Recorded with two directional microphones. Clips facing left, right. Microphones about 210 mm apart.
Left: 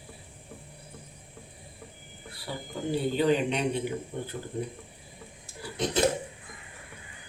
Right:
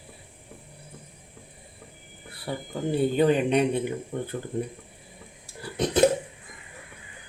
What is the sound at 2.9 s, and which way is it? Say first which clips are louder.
Speech: right 3 dB; 55° right (ahead or behind).